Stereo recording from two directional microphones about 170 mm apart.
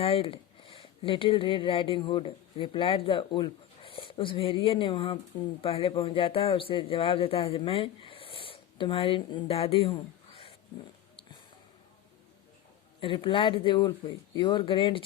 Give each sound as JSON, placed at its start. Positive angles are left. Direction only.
{"t": 0.0, "sound": "speech", "side_deg": 35}
{"t": 13.0, "sound": "speech", "side_deg": 30}